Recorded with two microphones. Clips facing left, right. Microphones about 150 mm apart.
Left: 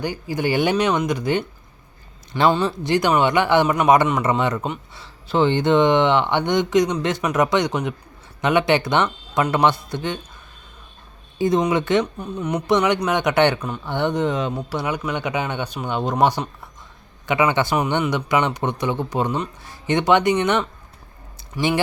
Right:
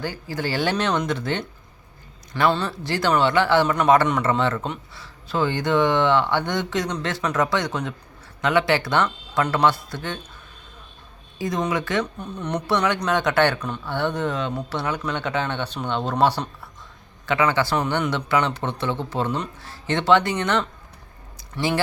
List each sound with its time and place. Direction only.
0.0 s speech: 15° left (ahead or behind)
11.3 s speech: 25° left (ahead or behind)
12.2 s speech: 10° left (ahead or behind)